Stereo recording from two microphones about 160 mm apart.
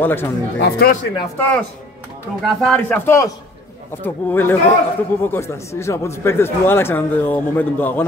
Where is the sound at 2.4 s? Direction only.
5° left (ahead or behind).